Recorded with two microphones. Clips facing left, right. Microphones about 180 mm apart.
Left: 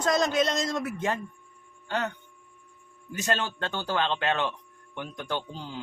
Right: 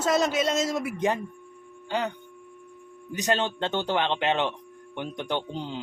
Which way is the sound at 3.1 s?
15° right (ahead or behind).